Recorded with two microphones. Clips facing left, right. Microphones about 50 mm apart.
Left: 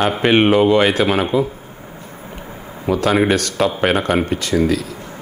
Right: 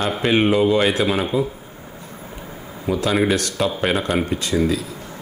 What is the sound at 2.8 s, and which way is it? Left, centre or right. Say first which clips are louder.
Speech: left 3 dB; left.